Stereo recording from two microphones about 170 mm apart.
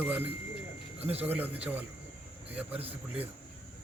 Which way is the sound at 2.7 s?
35° right (ahead or behind).